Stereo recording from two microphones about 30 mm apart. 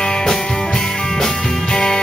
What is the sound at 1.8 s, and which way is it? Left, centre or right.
Music, left.